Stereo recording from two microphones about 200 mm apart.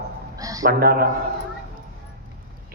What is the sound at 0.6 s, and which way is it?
Speech, 50° right (ahead or behind).